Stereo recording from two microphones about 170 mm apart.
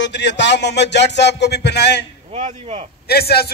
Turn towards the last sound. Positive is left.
turn(degrees=65)  # may be behind; listen again after turning